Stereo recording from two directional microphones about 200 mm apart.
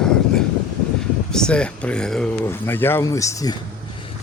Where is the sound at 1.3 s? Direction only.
5° left (ahead or behind).